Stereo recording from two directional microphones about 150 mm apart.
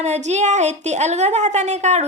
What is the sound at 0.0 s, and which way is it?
Speech, 50° right (ahead or behind).